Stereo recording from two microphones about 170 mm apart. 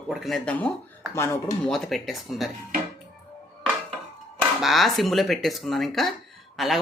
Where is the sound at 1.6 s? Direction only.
Centre (ahead or behind).